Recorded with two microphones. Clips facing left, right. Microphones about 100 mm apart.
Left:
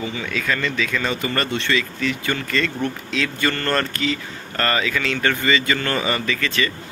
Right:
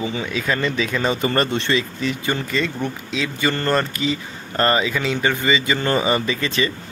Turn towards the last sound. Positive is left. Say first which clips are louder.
# right 1 dB
turn(degrees=-20)  # may be behind; listen again after turning